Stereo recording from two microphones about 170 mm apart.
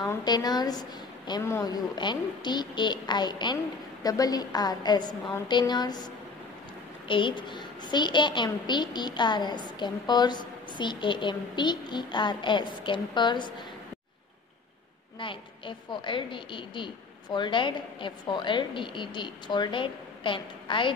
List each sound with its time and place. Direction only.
0.0 s a woman's voice: 25° left (ahead or behind)
7.1 s a woman's voice: 30° left (ahead or behind)
15.1 s a woman's voice: 30° left (ahead or behind)